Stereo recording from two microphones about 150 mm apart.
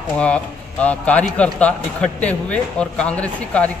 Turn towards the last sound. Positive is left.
turn(degrees=10)  # may be behind; listen again after turning